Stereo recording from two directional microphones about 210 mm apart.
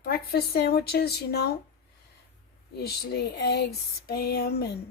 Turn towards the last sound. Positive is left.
turn(degrees=50)  # may be behind; listen again after turning